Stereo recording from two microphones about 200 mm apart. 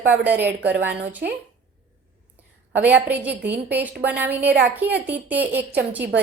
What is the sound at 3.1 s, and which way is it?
A woman's voice, 5° right (ahead or behind).